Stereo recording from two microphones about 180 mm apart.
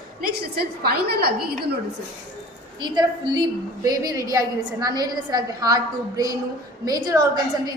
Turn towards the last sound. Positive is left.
turn(degrees=-20)  # may be behind; listen again after turning